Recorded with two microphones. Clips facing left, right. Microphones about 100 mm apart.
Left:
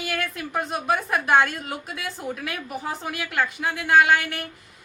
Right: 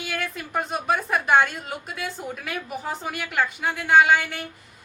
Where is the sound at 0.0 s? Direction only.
Centre (ahead or behind).